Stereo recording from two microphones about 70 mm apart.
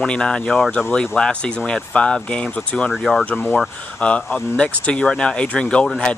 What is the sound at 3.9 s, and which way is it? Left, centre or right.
Speech, centre.